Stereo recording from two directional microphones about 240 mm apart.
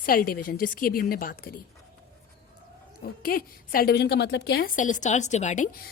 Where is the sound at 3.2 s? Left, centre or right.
Left.